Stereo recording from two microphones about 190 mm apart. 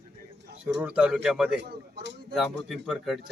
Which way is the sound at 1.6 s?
60° right (ahead or behind).